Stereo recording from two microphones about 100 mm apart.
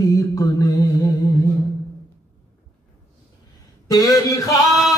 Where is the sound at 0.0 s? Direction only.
35° left (ahead or behind).